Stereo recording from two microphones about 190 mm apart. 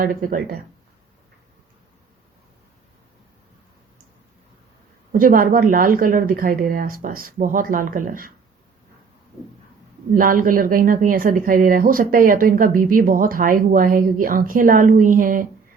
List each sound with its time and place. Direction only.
0.0 s speech: 45° right (ahead or behind)
5.1 s speech: 50° right (ahead or behind)
10.2 s speech: 45° right (ahead or behind)